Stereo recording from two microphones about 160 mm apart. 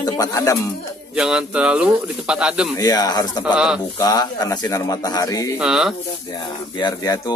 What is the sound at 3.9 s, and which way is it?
Speech, 20° left (ahead or behind).